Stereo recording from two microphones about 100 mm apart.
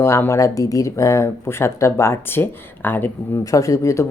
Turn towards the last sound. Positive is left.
turn(degrees=30)  # may be behind; listen again after turning